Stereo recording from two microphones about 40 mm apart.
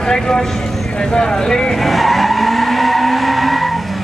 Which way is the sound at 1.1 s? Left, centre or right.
Centre.